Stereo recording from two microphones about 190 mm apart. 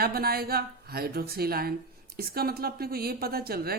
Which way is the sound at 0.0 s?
55° right (ahead or behind).